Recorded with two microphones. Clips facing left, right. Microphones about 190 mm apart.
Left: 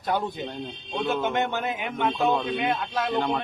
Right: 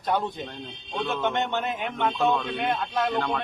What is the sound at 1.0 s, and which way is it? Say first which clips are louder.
A man's voice: left 2 dB; centre (ahead or behind).